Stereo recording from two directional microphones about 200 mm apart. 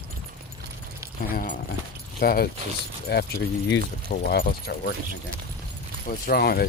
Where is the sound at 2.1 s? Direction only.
50° left (ahead or behind).